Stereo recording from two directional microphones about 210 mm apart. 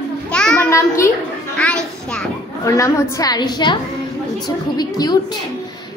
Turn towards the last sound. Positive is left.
turn(degrees=20)  # may be behind; listen again after turning